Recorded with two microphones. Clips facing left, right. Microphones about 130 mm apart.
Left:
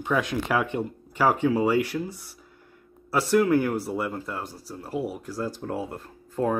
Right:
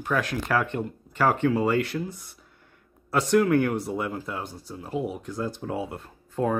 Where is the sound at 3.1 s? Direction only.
5° left (ahead or behind).